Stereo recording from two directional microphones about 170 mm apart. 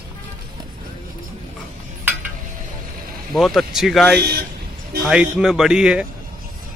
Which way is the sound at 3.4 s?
Centre (ahead or behind).